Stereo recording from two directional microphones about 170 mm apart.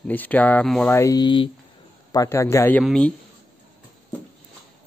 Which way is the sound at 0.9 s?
20° left (ahead or behind).